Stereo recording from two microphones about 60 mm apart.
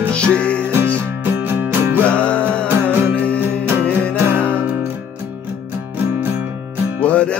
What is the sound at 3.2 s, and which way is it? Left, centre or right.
Music, left.